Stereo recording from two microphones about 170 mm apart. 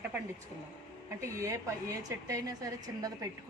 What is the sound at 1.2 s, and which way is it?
A woman's voice, 15° right (ahead or behind).